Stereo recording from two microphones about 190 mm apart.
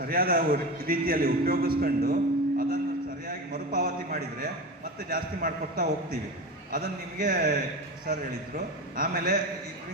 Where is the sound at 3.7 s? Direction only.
50° right (ahead or behind).